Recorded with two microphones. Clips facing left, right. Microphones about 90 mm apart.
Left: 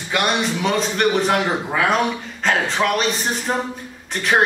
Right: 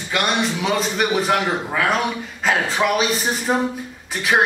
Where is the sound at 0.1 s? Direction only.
Centre (ahead or behind).